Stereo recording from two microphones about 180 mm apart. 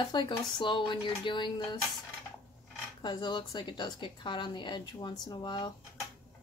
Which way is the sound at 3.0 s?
25° left (ahead or behind).